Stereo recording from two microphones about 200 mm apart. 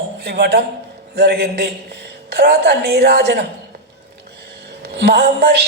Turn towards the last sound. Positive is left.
turn(degrees=-55)  # may be behind; listen again after turning